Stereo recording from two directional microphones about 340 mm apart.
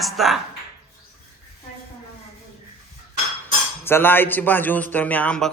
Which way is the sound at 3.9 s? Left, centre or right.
Centre.